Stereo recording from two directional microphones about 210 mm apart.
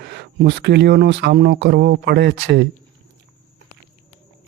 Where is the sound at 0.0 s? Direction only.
50° right (ahead or behind).